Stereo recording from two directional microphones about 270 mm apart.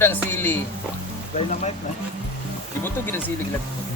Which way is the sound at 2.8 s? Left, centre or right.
Centre.